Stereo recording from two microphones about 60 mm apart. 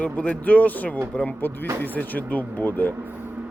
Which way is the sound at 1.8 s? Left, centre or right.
Left.